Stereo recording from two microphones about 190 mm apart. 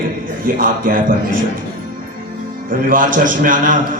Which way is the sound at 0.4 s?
45° right (ahead or behind).